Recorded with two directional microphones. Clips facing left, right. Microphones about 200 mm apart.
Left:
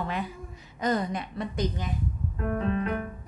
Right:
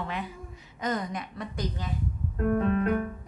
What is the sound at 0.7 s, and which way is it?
A woman's voice, 35° left (ahead or behind).